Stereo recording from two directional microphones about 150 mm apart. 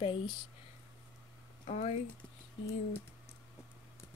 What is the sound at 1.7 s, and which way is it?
Speech, 55° left (ahead or behind).